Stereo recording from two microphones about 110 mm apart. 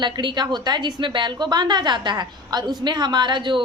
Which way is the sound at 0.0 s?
45° right (ahead or behind).